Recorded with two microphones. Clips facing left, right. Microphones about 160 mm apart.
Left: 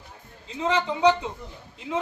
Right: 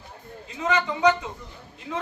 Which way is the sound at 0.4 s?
25° left (ahead or behind).